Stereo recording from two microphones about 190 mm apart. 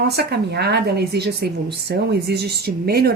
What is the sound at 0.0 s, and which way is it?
Speech, 60° right (ahead or behind).